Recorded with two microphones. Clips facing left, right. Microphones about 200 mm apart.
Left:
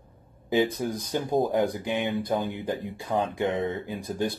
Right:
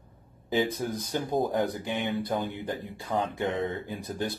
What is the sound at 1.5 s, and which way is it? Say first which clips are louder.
Speech: left 3 dB; 20° left (ahead or behind).